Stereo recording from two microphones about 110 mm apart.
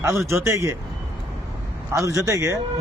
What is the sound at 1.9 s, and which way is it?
Speech, 30° right (ahead or behind).